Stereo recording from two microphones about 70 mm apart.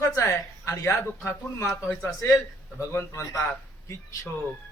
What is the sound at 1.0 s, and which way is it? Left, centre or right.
Speech, left.